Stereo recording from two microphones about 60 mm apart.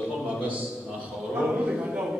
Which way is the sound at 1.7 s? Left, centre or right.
Right.